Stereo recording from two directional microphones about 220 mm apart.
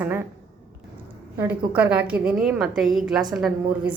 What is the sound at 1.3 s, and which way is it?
A woman's voice, 5° right (ahead or behind).